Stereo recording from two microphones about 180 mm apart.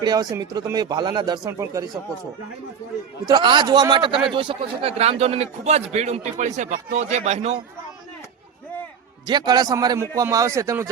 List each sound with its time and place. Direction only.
0.0 s speech: 20° right (ahead or behind)
3.2 s a man's voice: 25° right (ahead or behind)
9.2 s speech: 25° right (ahead or behind)